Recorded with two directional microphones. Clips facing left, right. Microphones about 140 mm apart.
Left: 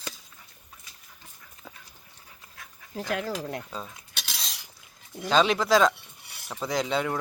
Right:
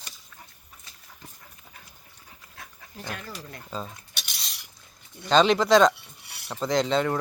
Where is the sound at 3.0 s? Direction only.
90° left.